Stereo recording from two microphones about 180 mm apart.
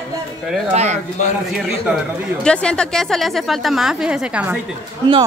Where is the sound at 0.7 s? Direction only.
40° right (ahead or behind).